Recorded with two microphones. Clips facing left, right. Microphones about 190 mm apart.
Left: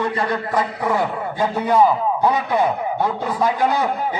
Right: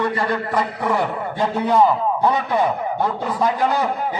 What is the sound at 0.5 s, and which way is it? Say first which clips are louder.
A man's voice: left 2 dB; 5° left (ahead or behind).